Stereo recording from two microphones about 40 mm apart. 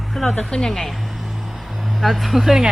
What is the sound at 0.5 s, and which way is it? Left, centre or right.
Speech, left.